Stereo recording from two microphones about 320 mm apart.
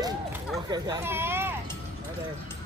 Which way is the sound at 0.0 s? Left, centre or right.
Centre.